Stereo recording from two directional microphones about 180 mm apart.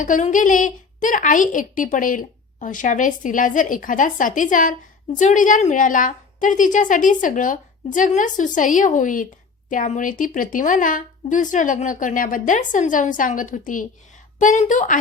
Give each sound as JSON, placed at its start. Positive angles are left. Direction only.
{"t": 0.0, "sound": "a woman's voice", "side_deg": 45}